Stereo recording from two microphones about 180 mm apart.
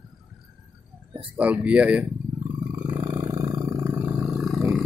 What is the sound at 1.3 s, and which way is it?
Speech, 10° right (ahead or behind).